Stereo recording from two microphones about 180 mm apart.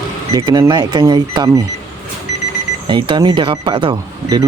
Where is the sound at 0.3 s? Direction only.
20° right (ahead or behind).